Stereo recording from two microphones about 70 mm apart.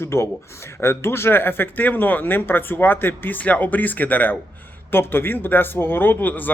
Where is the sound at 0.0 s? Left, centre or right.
Left.